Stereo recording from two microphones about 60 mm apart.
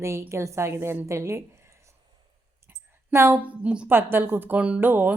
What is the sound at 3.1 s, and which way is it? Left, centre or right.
Speech, right.